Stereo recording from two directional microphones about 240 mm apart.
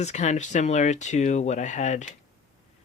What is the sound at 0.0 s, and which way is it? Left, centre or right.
Speech, left.